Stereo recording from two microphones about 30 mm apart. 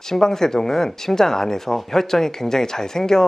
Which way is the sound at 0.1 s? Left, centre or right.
Centre.